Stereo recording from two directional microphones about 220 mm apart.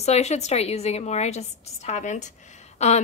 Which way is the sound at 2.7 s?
30° left (ahead or behind).